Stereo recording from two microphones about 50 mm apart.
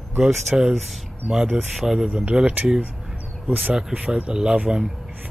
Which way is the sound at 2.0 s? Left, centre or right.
Right.